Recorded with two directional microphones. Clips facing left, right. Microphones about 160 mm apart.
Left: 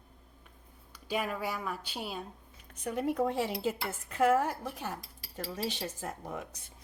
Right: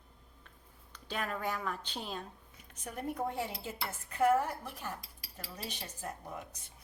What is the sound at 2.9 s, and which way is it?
Speech, 90° left.